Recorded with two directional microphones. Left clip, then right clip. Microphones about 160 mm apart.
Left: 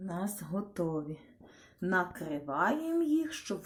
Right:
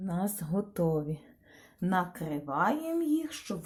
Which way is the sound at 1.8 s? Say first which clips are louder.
Even; 40° right (ahead or behind).